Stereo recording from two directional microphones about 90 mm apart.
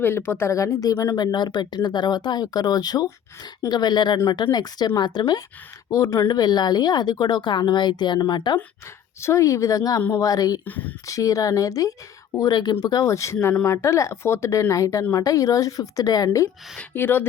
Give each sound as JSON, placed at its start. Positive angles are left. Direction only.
{"t": 0.0, "sound": "speech", "side_deg": 25}
{"t": 1.2, "sound": "speech", "side_deg": 50}
{"t": 5.9, "sound": "speech", "side_deg": 40}
{"t": 9.2, "sound": "speech", "side_deg": 35}
{"t": 10.7, "sound": "speech", "side_deg": 20}
{"t": 11.0, "sound": "speech", "side_deg": 40}
{"t": 12.4, "sound": "speech", "side_deg": 50}
{"t": 13.1, "sound": "speech", "side_deg": 35}
{"t": 13.3, "sound": "speech", "side_deg": 15}
{"t": 13.7, "sound": "speech", "side_deg": 30}
{"t": 16.9, "sound": "speech", "side_deg": 25}